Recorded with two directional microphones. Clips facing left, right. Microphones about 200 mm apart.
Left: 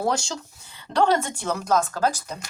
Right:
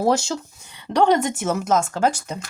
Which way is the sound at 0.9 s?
15° right (ahead or behind).